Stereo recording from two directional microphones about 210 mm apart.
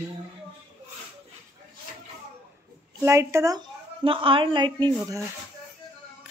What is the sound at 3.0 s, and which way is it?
A woman's voice, 15° right (ahead or behind).